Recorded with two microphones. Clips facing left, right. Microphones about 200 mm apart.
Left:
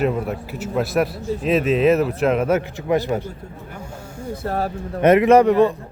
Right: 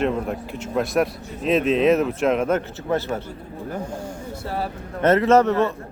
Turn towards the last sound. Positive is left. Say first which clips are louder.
# left 4 dB
turn(degrees=15)  # may be behind; listen again after turning